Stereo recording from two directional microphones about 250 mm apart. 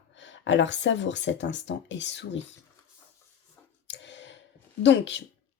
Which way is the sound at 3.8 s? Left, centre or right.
Left.